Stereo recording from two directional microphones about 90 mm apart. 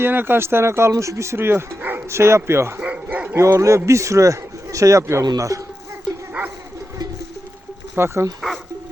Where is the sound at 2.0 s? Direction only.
30° right (ahead or behind).